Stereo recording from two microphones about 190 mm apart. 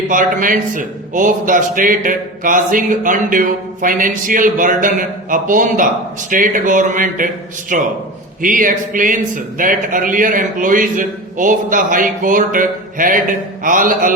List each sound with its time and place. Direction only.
0.1 s a man's voice: 45° right (ahead or behind)